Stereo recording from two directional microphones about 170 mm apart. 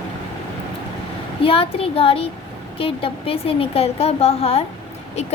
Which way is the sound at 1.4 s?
35° left (ahead or behind).